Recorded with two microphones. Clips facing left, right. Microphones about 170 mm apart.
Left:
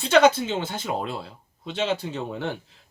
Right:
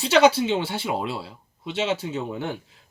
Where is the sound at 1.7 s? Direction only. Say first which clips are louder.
Right 1 dB; 5° right (ahead or behind).